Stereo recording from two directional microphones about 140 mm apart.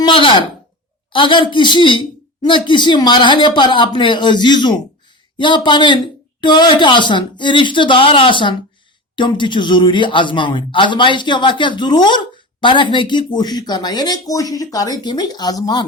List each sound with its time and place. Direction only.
0.0 s speech: 35° left (ahead or behind)